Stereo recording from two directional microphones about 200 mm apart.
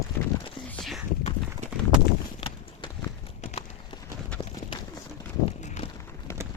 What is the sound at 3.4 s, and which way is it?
Clip-clop, 35° left (ahead or behind).